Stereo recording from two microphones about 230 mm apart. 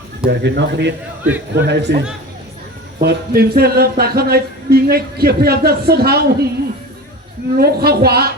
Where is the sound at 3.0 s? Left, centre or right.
Right.